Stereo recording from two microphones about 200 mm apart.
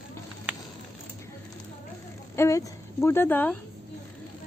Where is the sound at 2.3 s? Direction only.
15° left (ahead or behind).